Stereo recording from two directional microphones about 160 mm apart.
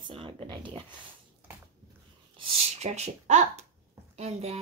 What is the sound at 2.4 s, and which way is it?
A child's voice, 40° right (ahead or behind).